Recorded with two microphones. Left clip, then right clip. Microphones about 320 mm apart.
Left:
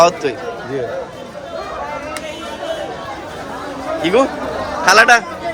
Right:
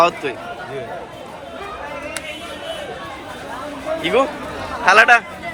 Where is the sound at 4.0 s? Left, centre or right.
Centre.